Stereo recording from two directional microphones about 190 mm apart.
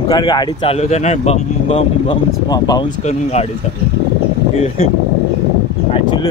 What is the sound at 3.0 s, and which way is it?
Speech, 35° left (ahead or behind).